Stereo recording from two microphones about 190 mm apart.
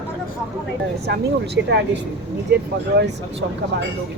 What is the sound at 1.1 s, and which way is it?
Speech, 65° right (ahead or behind).